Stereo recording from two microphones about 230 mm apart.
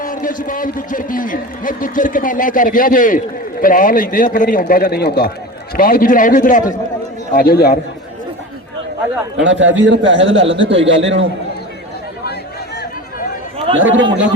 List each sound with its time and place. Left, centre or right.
0.0 s a man's voice: left
9.4 s a man's voice: right
12.2 s chatter: left
13.7 s a man's voice: right